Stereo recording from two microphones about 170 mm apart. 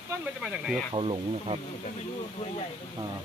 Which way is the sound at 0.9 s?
30° right (ahead or behind).